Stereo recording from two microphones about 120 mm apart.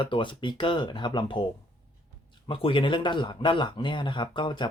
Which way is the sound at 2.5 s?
45° left (ahead or behind).